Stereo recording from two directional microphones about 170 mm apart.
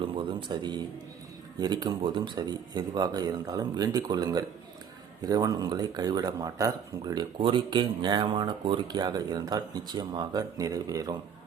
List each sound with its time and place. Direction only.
0.0 s speech: 30° right (ahead or behind)